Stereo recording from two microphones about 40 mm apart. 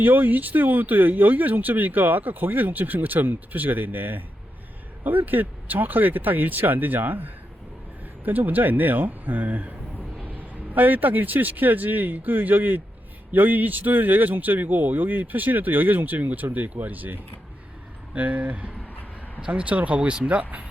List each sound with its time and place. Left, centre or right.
0.0 s speech: right
10.8 s speech: right
18.1 s speech: right